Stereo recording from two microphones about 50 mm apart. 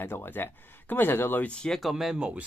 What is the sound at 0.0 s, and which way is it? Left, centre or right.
Speech, left.